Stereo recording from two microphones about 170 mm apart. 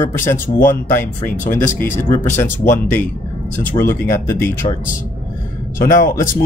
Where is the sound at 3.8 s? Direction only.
35° left (ahead or behind).